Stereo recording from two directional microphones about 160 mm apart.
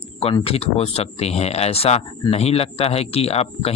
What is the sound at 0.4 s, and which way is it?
Speech, 35° left (ahead or behind).